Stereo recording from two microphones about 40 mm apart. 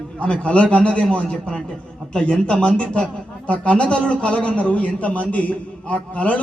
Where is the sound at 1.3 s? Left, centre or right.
Left.